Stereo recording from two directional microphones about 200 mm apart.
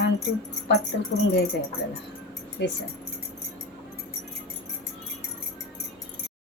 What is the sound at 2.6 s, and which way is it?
Speech, 55° left (ahead or behind).